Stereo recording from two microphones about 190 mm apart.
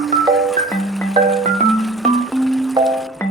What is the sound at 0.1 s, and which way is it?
Music, centre (ahead or behind).